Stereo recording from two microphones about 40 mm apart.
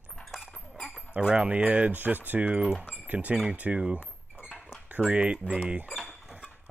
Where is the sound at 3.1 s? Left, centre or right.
Right.